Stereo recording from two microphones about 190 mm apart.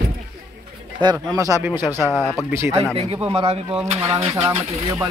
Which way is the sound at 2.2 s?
20° left (ahead or behind).